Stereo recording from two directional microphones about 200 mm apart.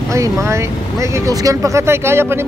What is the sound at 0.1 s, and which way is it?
Speech, 15° right (ahead or behind).